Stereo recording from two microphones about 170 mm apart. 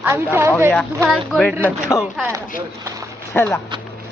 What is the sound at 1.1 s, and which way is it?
Speech, 5° left (ahead or behind).